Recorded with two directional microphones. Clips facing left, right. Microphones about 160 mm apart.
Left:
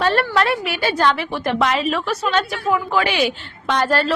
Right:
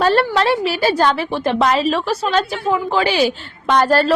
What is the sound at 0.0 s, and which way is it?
A woman's voice, 35° right (ahead or behind).